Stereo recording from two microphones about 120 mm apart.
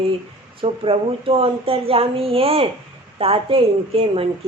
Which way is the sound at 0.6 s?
50° right (ahead or behind).